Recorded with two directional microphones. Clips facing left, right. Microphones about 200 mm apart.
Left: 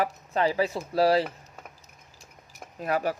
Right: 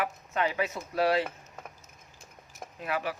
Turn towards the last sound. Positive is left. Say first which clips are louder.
# left 5 dB
turn(degrees=40)  # may be behind; listen again after turning